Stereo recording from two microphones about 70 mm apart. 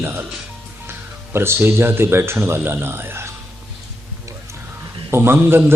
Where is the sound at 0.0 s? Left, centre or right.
Right.